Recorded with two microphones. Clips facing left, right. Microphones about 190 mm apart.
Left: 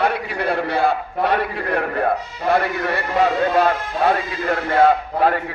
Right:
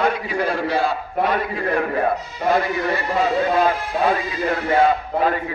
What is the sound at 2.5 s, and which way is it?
A man's voice, 65° left (ahead or behind).